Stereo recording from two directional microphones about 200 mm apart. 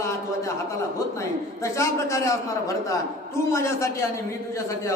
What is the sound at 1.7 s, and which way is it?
Speech, 15° left (ahead or behind).